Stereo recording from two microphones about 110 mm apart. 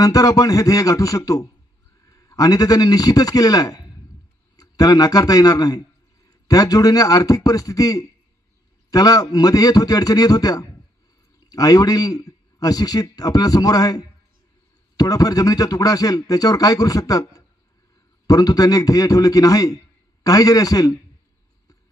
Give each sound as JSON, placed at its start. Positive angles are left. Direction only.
{"t": 0.0, "sound": "a man's voice", "side_deg": 35}